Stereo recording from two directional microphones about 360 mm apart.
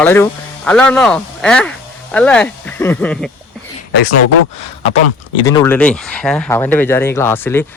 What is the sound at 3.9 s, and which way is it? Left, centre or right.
Speech, left.